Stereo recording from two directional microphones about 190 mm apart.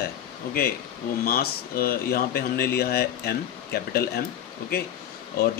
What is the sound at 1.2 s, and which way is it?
Speech, 55° left (ahead or behind).